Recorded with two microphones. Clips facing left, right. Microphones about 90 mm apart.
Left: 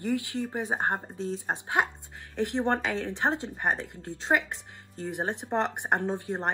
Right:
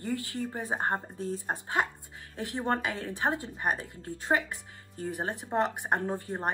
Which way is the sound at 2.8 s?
80° left.